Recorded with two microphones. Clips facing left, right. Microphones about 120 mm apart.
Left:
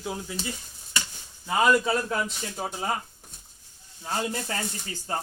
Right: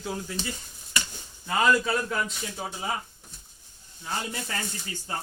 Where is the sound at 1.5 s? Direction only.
15° left (ahead or behind).